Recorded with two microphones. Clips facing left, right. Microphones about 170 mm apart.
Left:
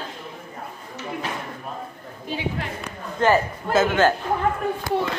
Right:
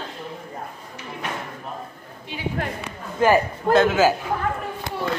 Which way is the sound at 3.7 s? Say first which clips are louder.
Right 1 dB; 5° right (ahead or behind).